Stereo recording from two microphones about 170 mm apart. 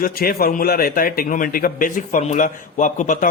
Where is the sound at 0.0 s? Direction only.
60° left (ahead or behind).